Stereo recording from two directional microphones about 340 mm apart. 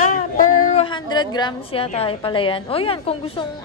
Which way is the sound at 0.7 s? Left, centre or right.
Centre.